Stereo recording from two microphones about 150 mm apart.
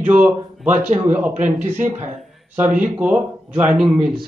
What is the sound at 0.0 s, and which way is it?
A man's voice, 10° right (ahead or behind).